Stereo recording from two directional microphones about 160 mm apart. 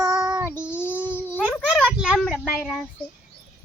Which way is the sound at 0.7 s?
15° left (ahead or behind).